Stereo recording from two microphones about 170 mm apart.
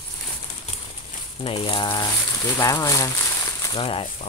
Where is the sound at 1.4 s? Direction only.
30° left (ahead or behind).